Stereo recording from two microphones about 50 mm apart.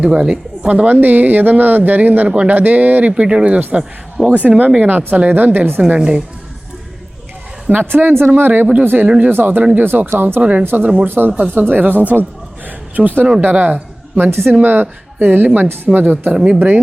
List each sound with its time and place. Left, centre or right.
0.0 s speech: centre
0.7 s speech: right
6.0 s a woman's voice: centre
7.7 s a woman's voice: right
12.6 s a sound: right
13.4 s a woman's voice: right
14.3 s a woman's voice: right
14.6 s speech: right
16.3 s a woman's voice: right
16.6 s speech: right